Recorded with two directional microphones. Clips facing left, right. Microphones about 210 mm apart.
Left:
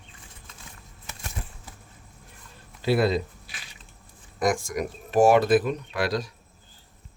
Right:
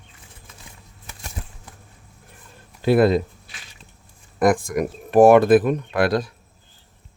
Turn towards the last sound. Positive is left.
turn(degrees=-55)  # may be behind; listen again after turning